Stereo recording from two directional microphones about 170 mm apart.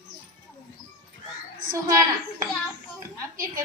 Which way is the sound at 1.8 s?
20° right (ahead or behind).